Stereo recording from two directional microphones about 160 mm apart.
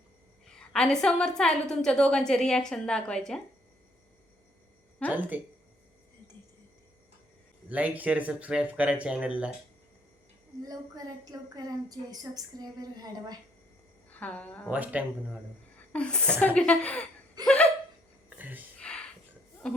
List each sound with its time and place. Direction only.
0.5 s a woman's voice: 5° left (ahead or behind)
5.0 s speech: 10° right (ahead or behind)
7.7 s speech: 10° right (ahead or behind)
10.6 s a woman's voice: 20° right (ahead or behind)
14.1 s a woman's voice: 10° left (ahead or behind)
14.7 s speech: 10° right (ahead or behind)
15.9 s a woman's voice: 5° left (ahead or behind)
17.4 s laughter: 5° left (ahead or behind)
18.3 s a sound: 10° right (ahead or behind)
18.8 s a sound: 5° left (ahead or behind)